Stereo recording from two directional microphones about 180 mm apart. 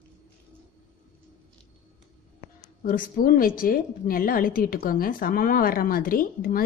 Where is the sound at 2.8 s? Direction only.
50° left (ahead or behind).